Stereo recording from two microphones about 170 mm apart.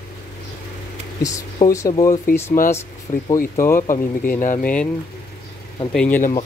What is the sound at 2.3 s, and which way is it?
Speech, 55° left (ahead or behind).